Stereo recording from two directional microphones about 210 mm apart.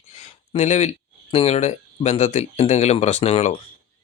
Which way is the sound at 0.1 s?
30° left (ahead or behind).